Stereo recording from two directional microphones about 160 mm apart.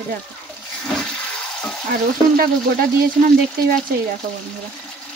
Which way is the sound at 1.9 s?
70° right (ahead or behind).